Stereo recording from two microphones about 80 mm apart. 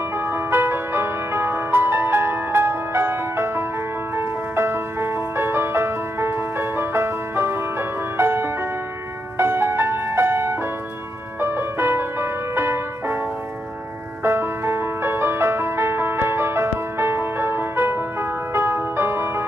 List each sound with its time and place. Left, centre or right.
0.2 s music: right
14.2 s music: right